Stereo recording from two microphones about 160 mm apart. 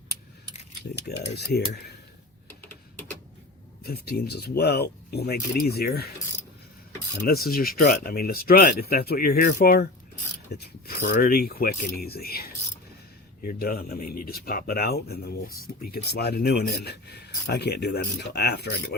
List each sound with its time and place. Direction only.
1.4 s speech: 90° left
2.6 s typing: 10° left (ahead or behind)
3.8 s speech: 75° left (ahead or behind)
7.3 s speech: 70° left (ahead or behind); by 18.9 s 90° left